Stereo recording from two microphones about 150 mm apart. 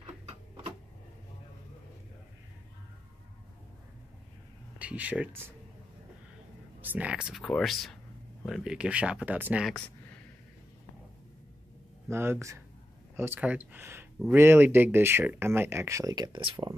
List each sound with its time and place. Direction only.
4.7 s speech: 10° right (ahead or behind)
6.8 s speech: 10° right (ahead or behind)
12.1 s speech: 15° right (ahead or behind); by 16.7 s 35° right (ahead or behind)